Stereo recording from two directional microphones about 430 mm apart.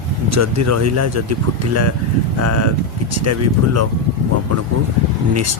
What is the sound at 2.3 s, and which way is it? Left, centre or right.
Speech, right.